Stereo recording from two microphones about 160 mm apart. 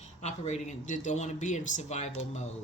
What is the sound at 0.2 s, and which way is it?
Speech, 45° left (ahead or behind).